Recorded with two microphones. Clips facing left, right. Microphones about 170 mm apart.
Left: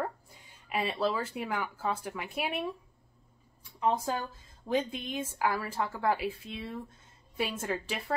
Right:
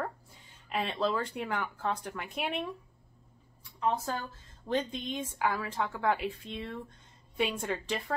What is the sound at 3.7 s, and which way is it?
Speech, 15° left (ahead or behind).